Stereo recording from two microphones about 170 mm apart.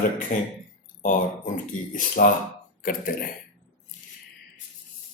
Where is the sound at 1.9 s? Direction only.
55° left (ahead or behind).